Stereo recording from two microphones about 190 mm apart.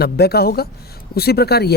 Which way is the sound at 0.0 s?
55° left (ahead or behind).